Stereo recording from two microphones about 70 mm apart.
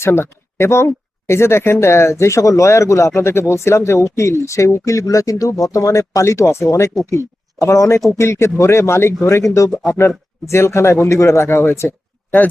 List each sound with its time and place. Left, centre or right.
0.0 s speech: left